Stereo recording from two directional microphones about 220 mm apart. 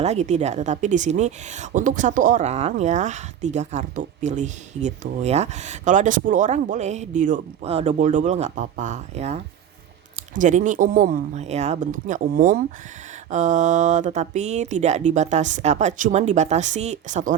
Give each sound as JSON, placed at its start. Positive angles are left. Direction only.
{"t": 0.0, "sound": "speech", "side_deg": -30}